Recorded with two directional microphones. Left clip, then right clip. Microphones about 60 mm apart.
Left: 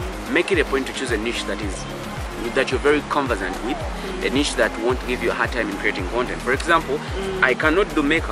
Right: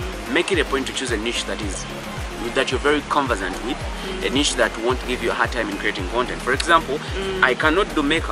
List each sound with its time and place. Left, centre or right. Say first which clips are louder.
0.3 s speech: left 1 dB; left
2.5 s speech: left 1 dB; left